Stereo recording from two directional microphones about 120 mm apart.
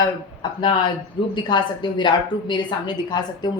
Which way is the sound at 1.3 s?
40° left (ahead or behind).